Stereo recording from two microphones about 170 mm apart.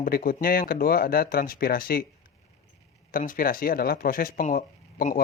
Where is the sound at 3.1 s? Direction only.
55° left (ahead or behind).